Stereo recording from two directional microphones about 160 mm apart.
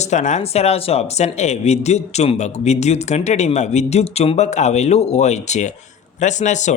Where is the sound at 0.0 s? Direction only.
45° left (ahead or behind).